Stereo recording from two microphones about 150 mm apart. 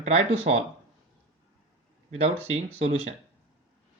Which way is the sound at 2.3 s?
15° right (ahead or behind).